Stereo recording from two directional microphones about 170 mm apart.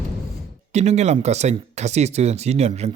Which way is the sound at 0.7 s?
40° right (ahead or behind).